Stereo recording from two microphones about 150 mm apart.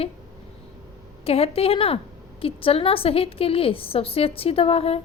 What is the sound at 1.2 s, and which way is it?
A woman's voice, 40° left (ahead or behind).